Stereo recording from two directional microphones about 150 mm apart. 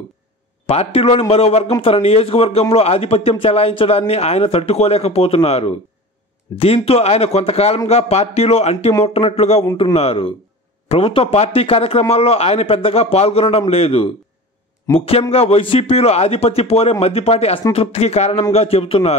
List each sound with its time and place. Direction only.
0.7 s a man's voice: 40° left (ahead or behind)